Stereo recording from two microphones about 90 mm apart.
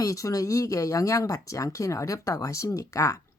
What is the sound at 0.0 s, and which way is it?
Speech, 40° left (ahead or behind).